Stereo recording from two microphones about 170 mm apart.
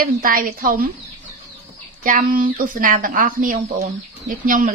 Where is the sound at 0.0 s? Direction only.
55° right (ahead or behind).